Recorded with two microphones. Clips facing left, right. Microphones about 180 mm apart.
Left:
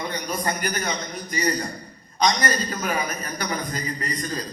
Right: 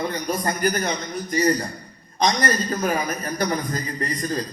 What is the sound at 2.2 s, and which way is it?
Speech, 40° right (ahead or behind).